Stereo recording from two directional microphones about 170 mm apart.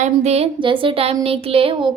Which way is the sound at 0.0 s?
40° right (ahead or behind).